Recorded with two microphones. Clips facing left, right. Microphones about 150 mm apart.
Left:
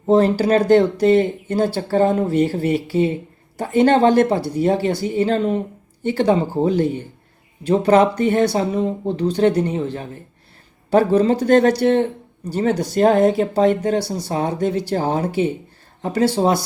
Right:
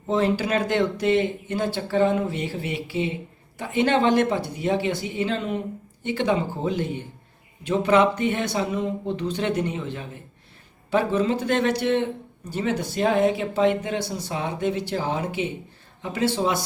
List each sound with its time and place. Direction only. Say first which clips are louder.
0.1 s speech: left 8 dB; 40° left (ahead or behind)